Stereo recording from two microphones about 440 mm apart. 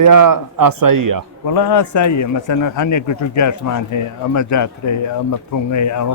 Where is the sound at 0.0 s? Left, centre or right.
Right.